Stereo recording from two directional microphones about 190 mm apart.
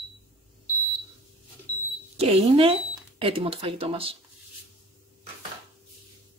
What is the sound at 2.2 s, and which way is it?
Speech, 30° right (ahead or behind).